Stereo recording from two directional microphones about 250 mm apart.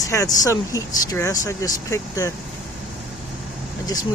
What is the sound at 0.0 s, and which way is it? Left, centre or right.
Speech, centre.